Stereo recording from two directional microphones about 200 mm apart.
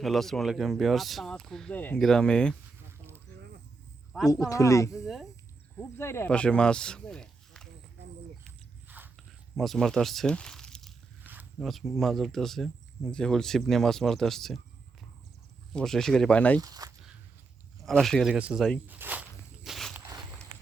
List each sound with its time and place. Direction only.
0.0 s speech: centre (ahead or behind)
4.3 s speech: 15° left (ahead or behind)
5.0 s speech: centre (ahead or behind)
5.7 s speech: 10° left (ahead or behind)
8.9 s a sound: 10° right (ahead or behind)
9.6 s speech: centre (ahead or behind)
15.7 s speech: centre (ahead or behind)
16.6 s speech: 20° right (ahead or behind)
17.8 s speech: centre (ahead or behind)
19.6 s walk: centre (ahead or behind)